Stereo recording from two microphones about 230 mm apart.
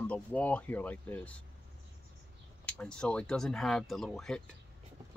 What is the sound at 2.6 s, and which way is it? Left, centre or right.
Speech, centre.